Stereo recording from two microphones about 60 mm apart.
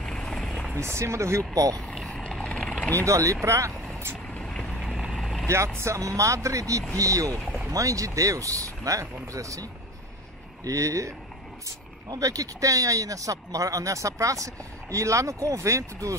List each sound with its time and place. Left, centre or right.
0.0 s vehicle: centre
0.7 s speech: right
1.5 s speech: right
1.8 s vehicle: centre
2.0 s vehicle: centre
3.1 s speech: right
4.4 s vehicle: centre
4.6 s vehicle: centre
5.8 s speech: right
11.6 s speech: right